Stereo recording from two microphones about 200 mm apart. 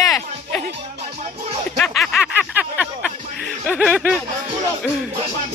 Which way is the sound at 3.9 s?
5° right (ahead or behind).